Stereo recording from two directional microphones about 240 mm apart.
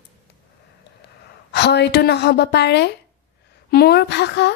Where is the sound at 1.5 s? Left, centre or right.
Left.